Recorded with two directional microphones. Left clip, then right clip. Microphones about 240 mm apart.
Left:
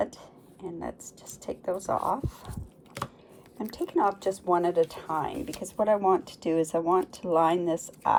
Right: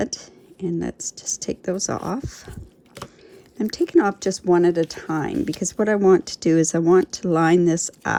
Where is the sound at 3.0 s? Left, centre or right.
Centre.